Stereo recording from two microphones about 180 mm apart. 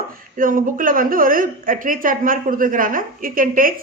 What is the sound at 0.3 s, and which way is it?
A woman's voice, 50° right (ahead or behind).